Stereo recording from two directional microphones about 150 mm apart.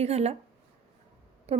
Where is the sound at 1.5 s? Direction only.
45° right (ahead or behind).